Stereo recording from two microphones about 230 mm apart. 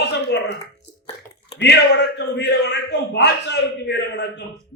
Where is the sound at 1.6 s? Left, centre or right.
Left.